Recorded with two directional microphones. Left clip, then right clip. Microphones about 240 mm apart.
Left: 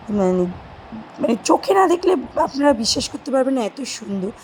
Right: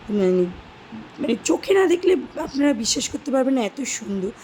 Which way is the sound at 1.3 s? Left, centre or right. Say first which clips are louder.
Left 3 dB; centre.